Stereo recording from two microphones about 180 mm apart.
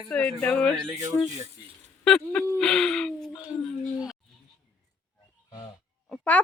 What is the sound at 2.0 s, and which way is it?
Speech, 5° left (ahead or behind).